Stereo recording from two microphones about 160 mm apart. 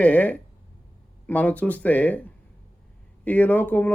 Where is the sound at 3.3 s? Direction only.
10° left (ahead or behind).